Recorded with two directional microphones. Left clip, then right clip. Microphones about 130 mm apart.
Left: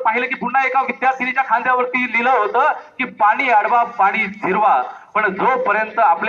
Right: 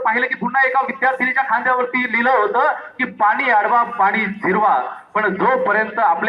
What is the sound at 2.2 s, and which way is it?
A man's voice, 55° right (ahead or behind).